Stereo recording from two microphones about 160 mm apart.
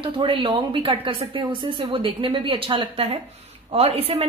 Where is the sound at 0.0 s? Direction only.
30° right (ahead or behind).